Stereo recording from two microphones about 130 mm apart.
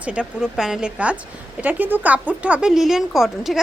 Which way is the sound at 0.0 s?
10° right (ahead or behind).